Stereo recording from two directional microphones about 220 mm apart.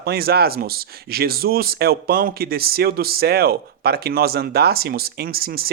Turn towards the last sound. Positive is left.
turn(degrees=-45)  # may be behind; listen again after turning